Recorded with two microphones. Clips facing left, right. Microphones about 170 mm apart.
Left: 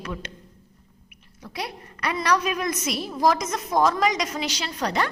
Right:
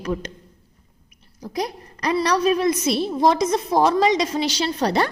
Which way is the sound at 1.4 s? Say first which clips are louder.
Right 7 dB; 35° right (ahead or behind).